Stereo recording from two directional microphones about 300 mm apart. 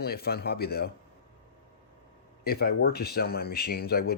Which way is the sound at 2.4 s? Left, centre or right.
Left.